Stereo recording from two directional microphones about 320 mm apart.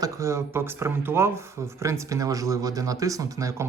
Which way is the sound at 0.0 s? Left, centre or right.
Centre.